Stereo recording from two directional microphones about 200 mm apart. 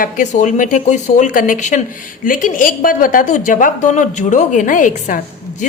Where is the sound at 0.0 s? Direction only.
40° left (ahead or behind).